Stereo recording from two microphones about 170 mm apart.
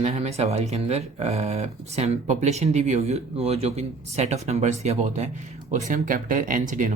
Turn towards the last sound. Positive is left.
turn(degrees=-50)  # may be behind; listen again after turning